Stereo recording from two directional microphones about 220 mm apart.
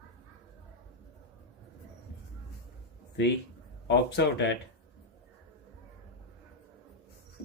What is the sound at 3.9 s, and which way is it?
Speech, 50° left (ahead or behind).